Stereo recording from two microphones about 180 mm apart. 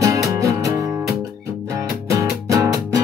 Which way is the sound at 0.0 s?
20° right (ahead or behind).